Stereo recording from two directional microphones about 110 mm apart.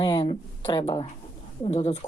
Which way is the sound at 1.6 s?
75° left (ahead or behind).